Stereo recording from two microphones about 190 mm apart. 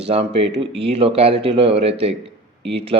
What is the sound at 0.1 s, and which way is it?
A man's voice, 30° right (ahead or behind).